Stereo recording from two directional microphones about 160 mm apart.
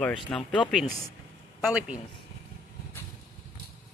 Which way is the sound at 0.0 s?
5° left (ahead or behind).